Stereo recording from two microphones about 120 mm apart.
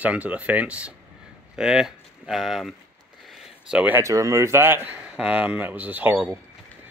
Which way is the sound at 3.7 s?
10° right (ahead or behind).